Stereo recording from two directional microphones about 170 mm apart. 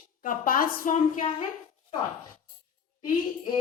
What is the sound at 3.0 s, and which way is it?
Speech, 30° left (ahead or behind).